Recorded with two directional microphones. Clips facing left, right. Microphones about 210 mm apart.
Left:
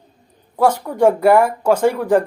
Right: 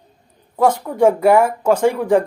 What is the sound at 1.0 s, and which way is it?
Speech, 5° right (ahead or behind).